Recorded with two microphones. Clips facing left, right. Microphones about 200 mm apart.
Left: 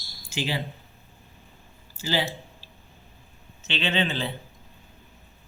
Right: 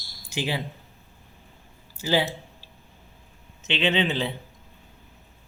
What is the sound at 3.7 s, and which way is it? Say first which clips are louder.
Speech: right 3 dB; 15° right (ahead or behind).